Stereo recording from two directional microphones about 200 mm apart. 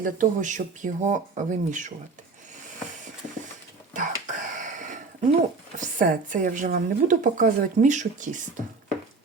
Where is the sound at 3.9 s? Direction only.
40° right (ahead or behind).